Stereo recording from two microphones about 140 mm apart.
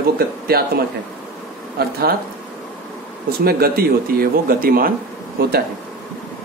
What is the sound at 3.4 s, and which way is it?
Speech, 90° right.